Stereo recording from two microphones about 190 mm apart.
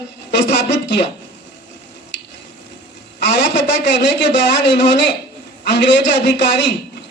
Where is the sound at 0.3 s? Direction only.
65° left (ahead or behind).